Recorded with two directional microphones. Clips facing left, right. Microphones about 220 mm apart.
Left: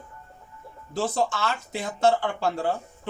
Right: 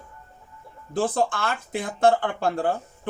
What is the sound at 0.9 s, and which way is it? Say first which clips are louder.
Speech: right 2 dB; 55° right (ahead or behind).